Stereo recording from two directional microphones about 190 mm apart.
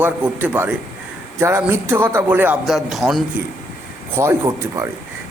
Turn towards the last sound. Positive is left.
turn(degrees=-15)  # may be behind; listen again after turning